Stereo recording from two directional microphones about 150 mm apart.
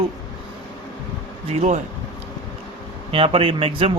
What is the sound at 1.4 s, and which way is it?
Speech, 50° right (ahead or behind).